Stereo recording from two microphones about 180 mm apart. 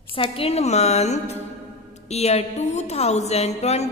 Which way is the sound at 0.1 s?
30° left (ahead or behind).